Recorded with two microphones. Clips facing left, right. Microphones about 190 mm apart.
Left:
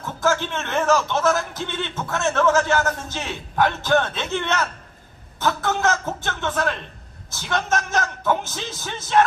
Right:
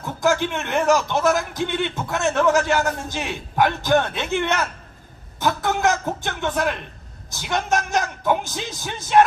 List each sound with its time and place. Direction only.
0.0 s a man's voice: 15° right (ahead or behind)